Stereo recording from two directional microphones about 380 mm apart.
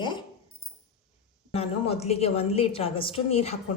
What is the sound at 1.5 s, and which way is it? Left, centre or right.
A woman's voice, centre.